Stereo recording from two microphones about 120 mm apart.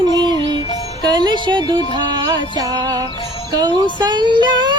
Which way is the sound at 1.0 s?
40° right (ahead or behind).